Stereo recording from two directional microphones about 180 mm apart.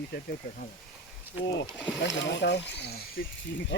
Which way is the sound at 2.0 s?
75° left (ahead or behind).